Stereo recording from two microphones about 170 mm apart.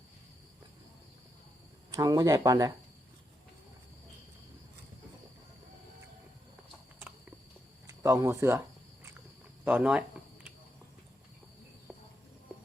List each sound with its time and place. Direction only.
1.9 s speech: 20° right (ahead or behind)
8.0 s speech: 20° right (ahead or behind)
9.6 s speech: 10° right (ahead or behind)